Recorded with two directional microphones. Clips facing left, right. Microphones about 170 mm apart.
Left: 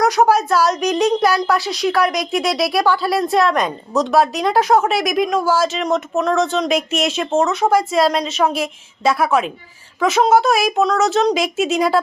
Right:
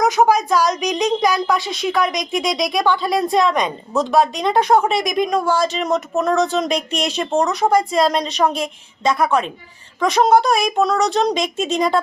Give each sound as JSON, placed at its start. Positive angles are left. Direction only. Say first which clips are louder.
{"t": 0.0, "sound": "a woman's voice", "louder": "left 1 dB", "side_deg": 0}